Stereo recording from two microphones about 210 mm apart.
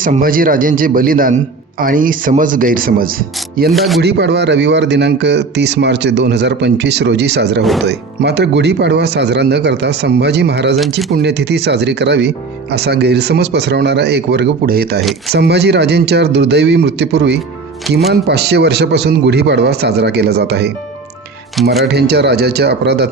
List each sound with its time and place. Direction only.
0.0 s speech: 40° right (ahead or behind)
3.7 s speech: centre (ahead or behind)
4.0 s a man's voice: 55° right (ahead or behind)
21.5 s speech: centre (ahead or behind)
21.8 s a man's voice: 50° right (ahead or behind)